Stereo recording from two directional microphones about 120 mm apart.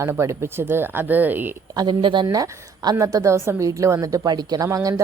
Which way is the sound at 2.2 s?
30° right (ahead or behind).